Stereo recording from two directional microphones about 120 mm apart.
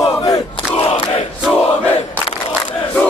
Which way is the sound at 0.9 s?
50° left (ahead or behind).